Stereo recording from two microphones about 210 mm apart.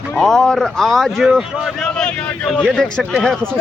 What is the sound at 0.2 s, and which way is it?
A man's voice, 5° left (ahead or behind).